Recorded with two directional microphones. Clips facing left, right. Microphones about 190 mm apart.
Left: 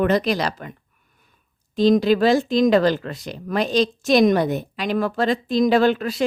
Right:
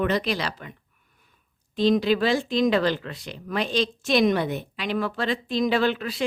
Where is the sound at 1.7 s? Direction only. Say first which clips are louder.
Left 4 dB; 40° left (ahead or behind).